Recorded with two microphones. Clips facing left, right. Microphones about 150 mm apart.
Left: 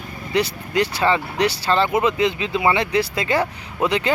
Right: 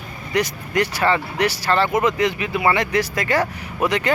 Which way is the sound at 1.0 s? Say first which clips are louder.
Even; 15° left (ahead or behind).